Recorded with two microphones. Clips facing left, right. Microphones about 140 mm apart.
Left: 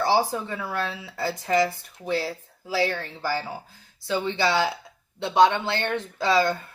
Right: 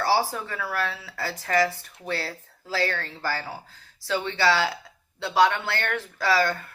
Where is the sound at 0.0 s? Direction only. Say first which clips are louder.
Left 2 dB; 20° left (ahead or behind).